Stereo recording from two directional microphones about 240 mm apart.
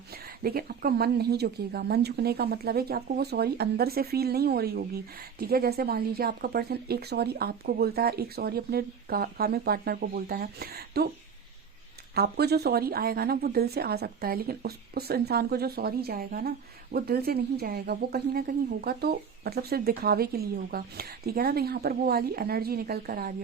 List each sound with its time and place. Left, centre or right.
0.1 s a woman's voice: right
12.1 s a woman's voice: right